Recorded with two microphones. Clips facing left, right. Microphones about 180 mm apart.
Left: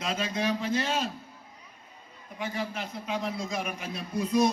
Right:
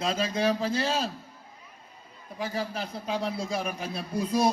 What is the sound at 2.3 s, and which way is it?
A man's voice, 35° right (ahead or behind).